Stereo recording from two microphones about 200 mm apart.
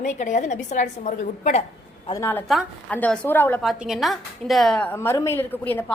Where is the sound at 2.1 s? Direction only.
15° left (ahead or behind).